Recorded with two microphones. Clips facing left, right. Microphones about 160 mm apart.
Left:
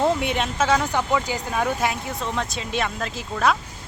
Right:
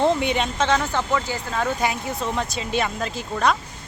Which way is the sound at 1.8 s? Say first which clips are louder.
Right 1 dB; centre (ahead or behind).